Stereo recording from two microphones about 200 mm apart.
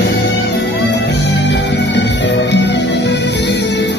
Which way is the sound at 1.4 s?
60° left (ahead or behind).